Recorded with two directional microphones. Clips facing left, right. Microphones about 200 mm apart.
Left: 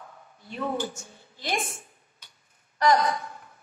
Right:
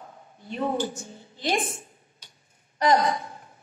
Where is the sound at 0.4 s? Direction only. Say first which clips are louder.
Right 3 dB; 20° right (ahead or behind).